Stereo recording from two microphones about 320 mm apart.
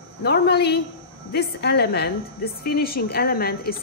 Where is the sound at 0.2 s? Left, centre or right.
Left.